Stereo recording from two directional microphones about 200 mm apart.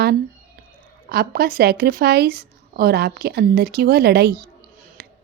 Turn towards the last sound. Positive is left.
turn(degrees=-50)  # may be behind; listen again after turning